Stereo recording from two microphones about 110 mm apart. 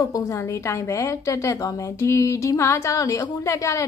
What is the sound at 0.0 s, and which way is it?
A woman's voice, 30° left (ahead or behind).